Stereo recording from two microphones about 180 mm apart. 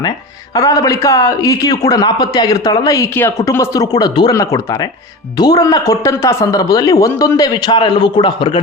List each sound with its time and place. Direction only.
0.5 s speech: 20° left (ahead or behind)